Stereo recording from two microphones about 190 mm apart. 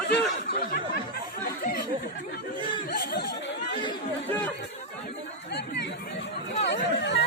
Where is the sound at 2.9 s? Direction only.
55° left (ahead or behind).